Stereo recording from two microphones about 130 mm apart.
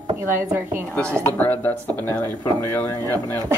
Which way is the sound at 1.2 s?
15° left (ahead or behind).